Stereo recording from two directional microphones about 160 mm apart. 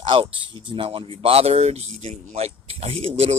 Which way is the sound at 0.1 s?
35° right (ahead or behind).